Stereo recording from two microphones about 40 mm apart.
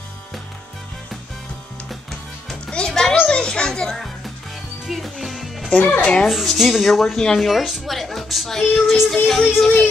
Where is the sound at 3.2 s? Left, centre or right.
Left.